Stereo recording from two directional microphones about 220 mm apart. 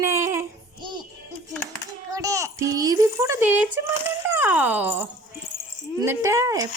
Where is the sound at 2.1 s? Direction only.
15° right (ahead or behind).